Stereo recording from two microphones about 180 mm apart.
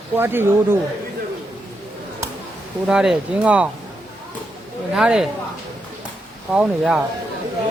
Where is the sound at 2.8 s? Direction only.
5° right (ahead or behind).